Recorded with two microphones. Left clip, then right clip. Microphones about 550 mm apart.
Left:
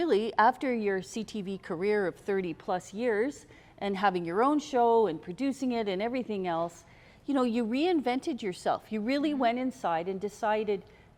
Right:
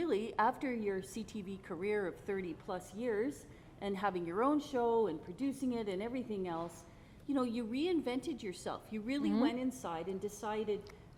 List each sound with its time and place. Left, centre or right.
0.0 s a woman's voice: left